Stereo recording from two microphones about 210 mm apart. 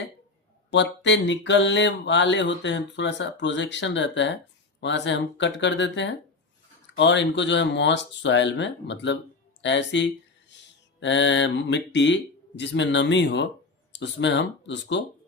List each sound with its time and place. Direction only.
0.7 s mantra: 55° left (ahead or behind)